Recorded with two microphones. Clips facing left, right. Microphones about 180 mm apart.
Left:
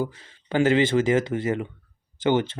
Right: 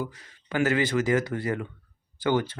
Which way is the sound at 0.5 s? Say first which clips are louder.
Left 5 dB; 25° left (ahead or behind).